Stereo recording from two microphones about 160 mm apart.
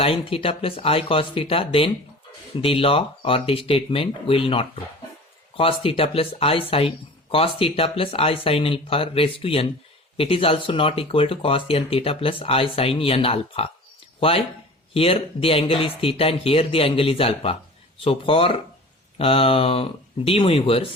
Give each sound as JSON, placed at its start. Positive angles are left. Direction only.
{"t": 0.0, "sound": "speech", "side_deg": 35}